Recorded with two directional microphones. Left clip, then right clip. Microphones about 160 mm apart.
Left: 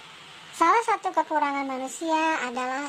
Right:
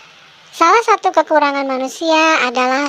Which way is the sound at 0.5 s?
30° right (ahead or behind).